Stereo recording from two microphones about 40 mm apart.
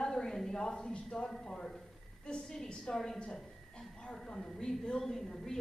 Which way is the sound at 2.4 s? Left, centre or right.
Centre.